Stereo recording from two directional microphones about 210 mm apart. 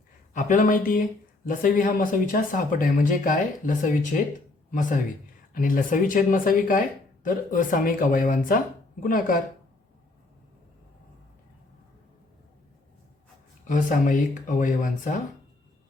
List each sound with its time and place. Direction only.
0.3 s speech: 35° left (ahead or behind)
13.7 s speech: 35° left (ahead or behind)